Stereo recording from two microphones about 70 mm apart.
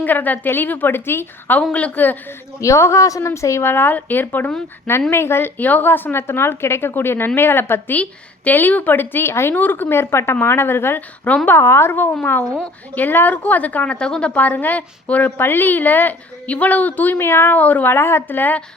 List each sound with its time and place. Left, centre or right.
0.0 s a woman's voice: left
1.7 s a woman's voice: left
2.6 s a woman's voice: left
5.5 s a woman's voice: left
17.6 s a woman's voice: left